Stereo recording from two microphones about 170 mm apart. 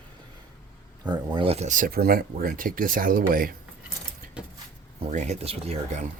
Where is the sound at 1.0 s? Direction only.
25° right (ahead or behind); by 3.6 s 55° right (ahead or behind).